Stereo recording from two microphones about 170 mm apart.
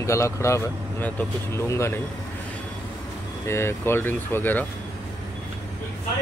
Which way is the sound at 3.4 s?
15° left (ahead or behind).